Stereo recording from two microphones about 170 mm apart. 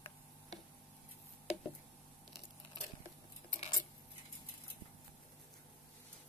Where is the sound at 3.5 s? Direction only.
35° left (ahead or behind).